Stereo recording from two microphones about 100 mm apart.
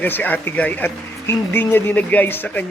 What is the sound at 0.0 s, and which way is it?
Speech, 20° left (ahead or behind).